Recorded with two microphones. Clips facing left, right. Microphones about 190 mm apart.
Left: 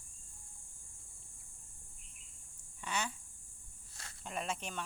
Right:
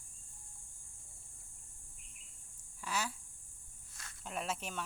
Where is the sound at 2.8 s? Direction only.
5° right (ahead or behind).